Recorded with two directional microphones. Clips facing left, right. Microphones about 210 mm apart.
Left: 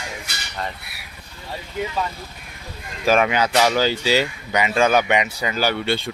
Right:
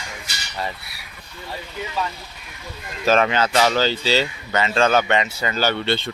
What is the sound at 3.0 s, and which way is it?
Speech, 10° left (ahead or behind).